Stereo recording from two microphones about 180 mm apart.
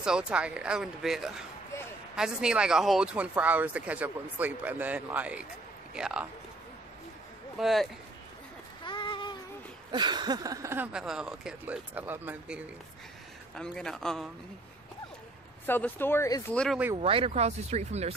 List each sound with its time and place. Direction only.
0.0 s speech: 5° right (ahead or behind)
7.5 s speech: centre (ahead or behind)
8.8 s a sound: 25° left (ahead or behind)
9.8 s speech: 25° right (ahead or behind)
13.6 s speech: 5° left (ahead or behind)
15.6 s speech: 10° left (ahead or behind)
16.5 s speech: centre (ahead or behind)
16.9 s speech: 30° right (ahead or behind)